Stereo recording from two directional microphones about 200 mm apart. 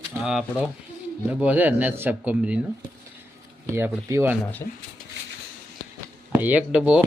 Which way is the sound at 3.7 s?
10° right (ahead or behind).